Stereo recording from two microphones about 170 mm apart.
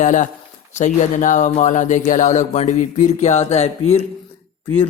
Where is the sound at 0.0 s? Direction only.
45° left (ahead or behind).